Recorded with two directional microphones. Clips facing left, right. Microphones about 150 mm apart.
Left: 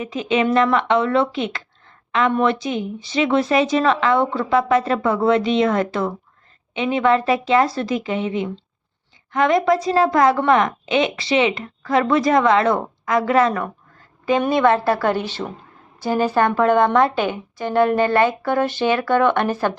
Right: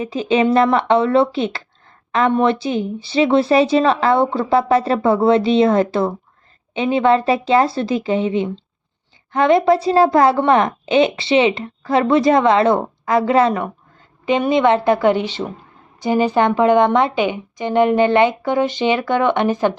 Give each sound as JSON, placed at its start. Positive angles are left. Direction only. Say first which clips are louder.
{"t": 0.0, "sound": "a woman's voice", "louder": "right 3 dB", "side_deg": -30}